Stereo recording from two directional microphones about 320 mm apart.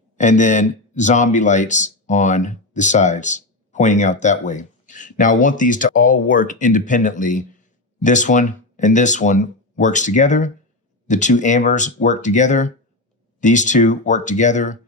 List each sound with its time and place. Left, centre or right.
0.2 s speech: left